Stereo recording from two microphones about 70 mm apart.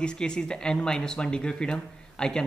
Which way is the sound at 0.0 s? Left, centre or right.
Centre.